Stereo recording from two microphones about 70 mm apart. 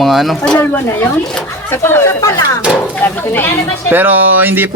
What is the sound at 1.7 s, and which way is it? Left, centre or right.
Speech, left.